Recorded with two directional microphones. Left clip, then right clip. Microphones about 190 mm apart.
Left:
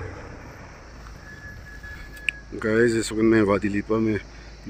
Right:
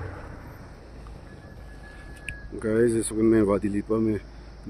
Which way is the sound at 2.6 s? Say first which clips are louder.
Left 2 dB; centre (ahead or behind).